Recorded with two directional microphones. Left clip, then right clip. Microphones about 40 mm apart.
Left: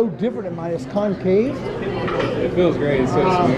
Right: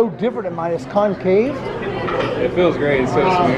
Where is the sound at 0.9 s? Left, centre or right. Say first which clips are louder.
Right 3 dB; right.